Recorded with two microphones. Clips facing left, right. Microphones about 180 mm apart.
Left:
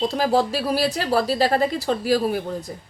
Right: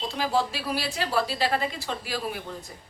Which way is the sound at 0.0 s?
40° left (ahead or behind).